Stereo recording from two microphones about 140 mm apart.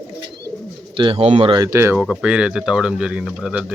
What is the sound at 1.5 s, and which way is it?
Speech, 25° right (ahead or behind).